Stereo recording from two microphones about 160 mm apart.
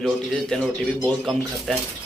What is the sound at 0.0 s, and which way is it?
Speech, centre (ahead or behind).